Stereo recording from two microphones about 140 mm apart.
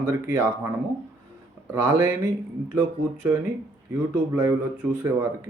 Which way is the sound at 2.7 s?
15° right (ahead or behind).